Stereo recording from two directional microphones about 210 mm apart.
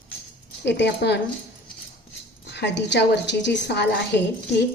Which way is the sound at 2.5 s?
55° left (ahead or behind).